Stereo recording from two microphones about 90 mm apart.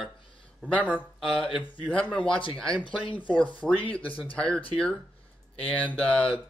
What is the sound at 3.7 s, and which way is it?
Speech, 15° left (ahead or behind).